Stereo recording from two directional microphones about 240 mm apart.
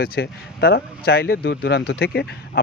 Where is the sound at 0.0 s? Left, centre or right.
Left.